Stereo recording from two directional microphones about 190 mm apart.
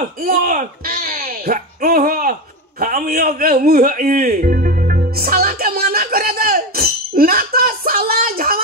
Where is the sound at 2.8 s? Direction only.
50° right (ahead or behind).